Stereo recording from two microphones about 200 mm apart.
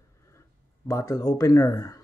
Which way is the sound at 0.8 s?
15° left (ahead or behind).